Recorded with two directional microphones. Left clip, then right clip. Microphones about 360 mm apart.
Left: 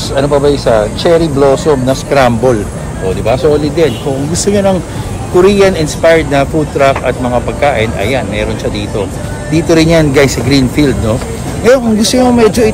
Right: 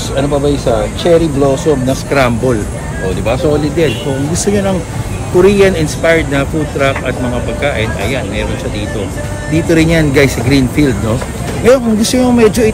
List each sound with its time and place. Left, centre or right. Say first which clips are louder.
0.1 s speech: left 4 dB; centre
9.5 s speech: left 3 dB; centre